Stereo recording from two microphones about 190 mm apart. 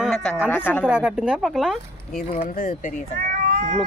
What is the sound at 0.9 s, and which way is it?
Speech, 5° right (ahead or behind).